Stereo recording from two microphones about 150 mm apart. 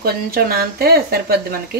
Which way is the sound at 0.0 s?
90° right.